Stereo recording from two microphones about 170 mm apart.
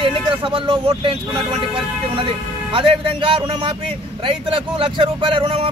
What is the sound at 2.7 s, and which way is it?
A man's voice, 30° right (ahead or behind).